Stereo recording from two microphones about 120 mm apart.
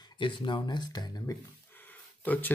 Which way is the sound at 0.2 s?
40° left (ahead or behind).